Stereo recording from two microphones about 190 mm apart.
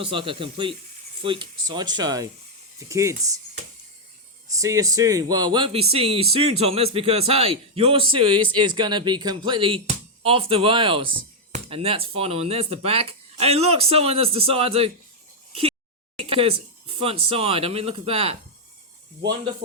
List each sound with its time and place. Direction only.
0.0 s speech: 30° right (ahead or behind)
4.5 s speech: 15° right (ahead or behind)
16.3 s speech: 30° right (ahead or behind)